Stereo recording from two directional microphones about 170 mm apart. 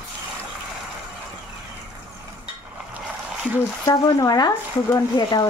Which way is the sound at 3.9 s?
20° left (ahead or behind).